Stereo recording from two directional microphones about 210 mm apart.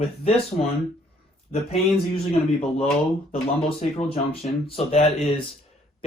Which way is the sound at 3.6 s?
30° left (ahead or behind).